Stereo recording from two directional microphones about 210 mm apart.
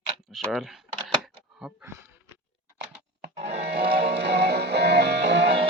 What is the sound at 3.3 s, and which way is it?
Music, 30° right (ahead or behind).